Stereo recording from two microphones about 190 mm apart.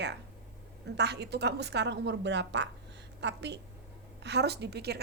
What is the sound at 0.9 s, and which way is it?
A woman's voice, 60° right (ahead or behind).